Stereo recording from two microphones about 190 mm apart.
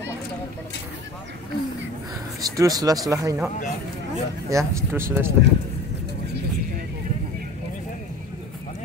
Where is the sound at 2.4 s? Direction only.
20° right (ahead or behind).